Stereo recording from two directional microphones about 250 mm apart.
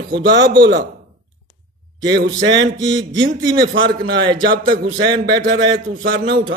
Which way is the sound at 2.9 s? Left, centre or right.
Centre.